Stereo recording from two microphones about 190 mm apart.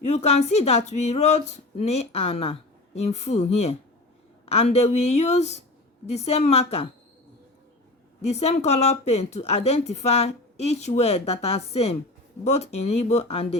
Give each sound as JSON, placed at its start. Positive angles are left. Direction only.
{"t": 0.1, "sound": "speech", "side_deg": 35}
{"t": 8.3, "sound": "speech", "side_deg": 35}